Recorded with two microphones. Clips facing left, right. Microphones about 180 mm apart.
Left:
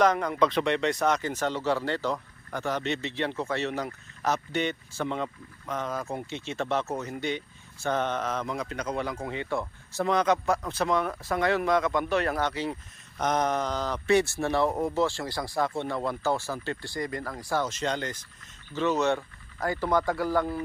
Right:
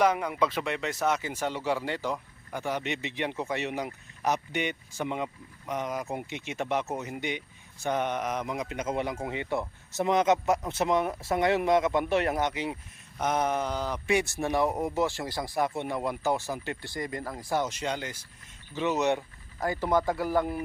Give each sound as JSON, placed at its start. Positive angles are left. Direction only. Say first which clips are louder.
{"t": 0.0, "sound": "speech", "louder": "left 2 dB", "side_deg": -10}